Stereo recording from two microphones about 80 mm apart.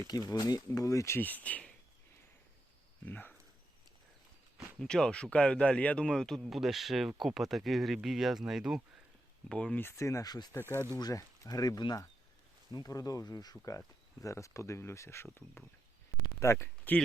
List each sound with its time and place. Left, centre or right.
0.1 s speech: left
1.2 s speech: left
3.1 s speech: left
4.5 s speech: centre
9.5 s speech: centre
10.0 s speech: left
10.6 s speech: left
11.0 s speech: left
13.7 s speech: left
16.9 s speech: left